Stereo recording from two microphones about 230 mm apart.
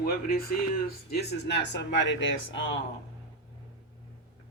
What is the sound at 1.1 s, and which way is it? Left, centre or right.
Speech, left.